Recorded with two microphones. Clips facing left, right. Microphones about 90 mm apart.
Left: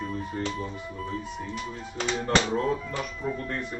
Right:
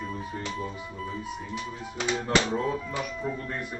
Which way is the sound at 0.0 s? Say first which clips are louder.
Left 3 dB; centre (ahead or behind).